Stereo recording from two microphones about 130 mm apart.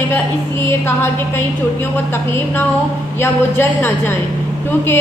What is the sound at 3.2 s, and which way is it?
Speech, 20° left (ahead or behind).